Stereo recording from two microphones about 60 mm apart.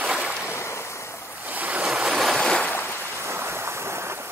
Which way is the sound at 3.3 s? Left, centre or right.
Right.